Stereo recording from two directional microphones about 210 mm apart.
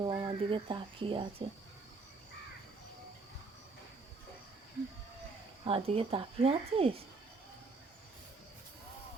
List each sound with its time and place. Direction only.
0.0 s speech: 20° right (ahead or behind)
5.6 s speech: 25° right (ahead or behind)